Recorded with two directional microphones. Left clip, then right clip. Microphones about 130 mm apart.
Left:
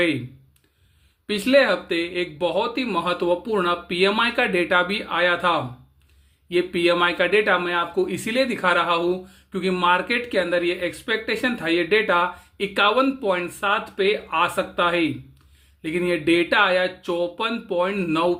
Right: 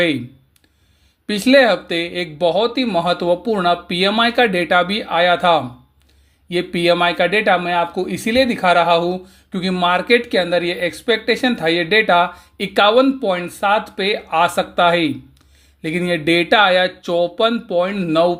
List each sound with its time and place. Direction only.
1.3 s speech: 45° right (ahead or behind)